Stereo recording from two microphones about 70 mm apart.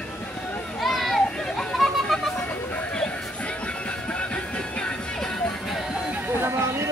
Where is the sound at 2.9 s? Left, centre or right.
Centre.